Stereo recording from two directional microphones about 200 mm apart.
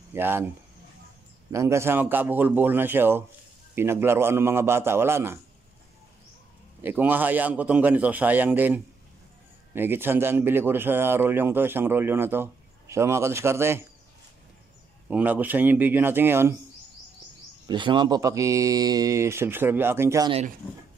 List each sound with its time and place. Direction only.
0.1 s a man's voice: 10° right (ahead or behind)
1.5 s a man's voice: 15° right (ahead or behind)
6.8 s a man's voice: 10° right (ahead or behind)
15.0 s a man's voice: 5° right (ahead or behind)
17.6 s a man's voice: 25° right (ahead or behind)